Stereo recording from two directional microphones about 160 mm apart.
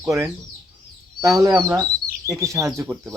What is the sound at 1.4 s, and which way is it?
Speech, 20° right (ahead or behind).